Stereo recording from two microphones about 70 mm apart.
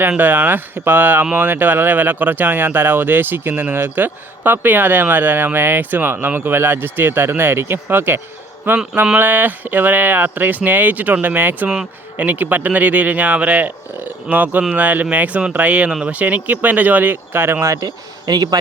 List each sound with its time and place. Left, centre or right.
0.2 s speech: right
17.7 s speech: right